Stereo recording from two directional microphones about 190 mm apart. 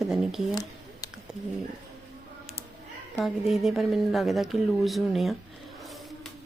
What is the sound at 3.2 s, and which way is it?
Speech, centre (ahead or behind).